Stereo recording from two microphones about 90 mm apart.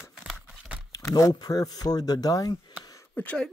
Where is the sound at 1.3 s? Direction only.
45° left (ahead or behind).